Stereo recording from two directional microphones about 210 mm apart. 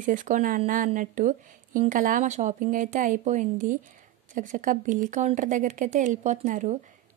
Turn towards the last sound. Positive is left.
turn(degrees=-35)  # may be behind; listen again after turning